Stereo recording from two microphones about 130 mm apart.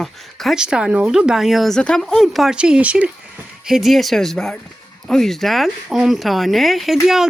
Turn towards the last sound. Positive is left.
turn(degrees=-5)  # may be behind; listen again after turning